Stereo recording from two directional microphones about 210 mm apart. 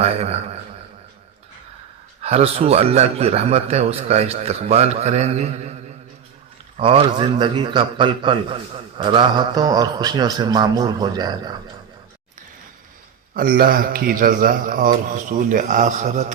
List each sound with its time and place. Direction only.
0.0 s a man's voice: 30° right (ahead or behind)
2.2 s a man's voice: 30° right (ahead or behind)
6.7 s a man's voice: 25° right (ahead or behind)
13.3 s a man's voice: 45° right (ahead or behind)